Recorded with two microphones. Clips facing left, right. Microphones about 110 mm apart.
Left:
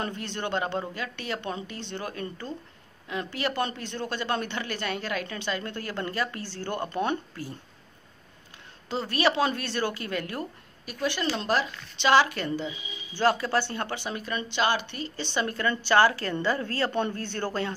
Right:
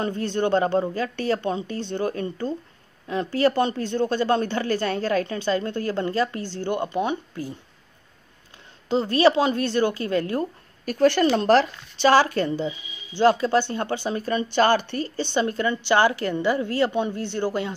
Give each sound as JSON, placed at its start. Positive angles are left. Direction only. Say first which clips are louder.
{"t": 0.0, "sound": "a woman's voice", "louder": "right 8 dB", "side_deg": -35}
{"t": 8.8, "sound": "a woman's voice", "louder": "right 7 dB", "side_deg": -25}
{"t": 10.9, "sound": "a woman's voice", "louder": "right 10 dB", "side_deg": -50}
{"t": 15.3, "sound": "a woman's voice", "louder": "right 4 dB", "side_deg": -25}